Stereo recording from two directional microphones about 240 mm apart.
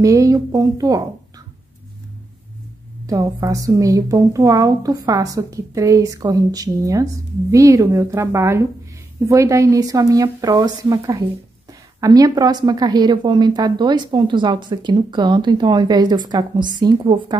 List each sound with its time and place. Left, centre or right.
0.0 s a woman's voice: centre
3.1 s a woman's voice: centre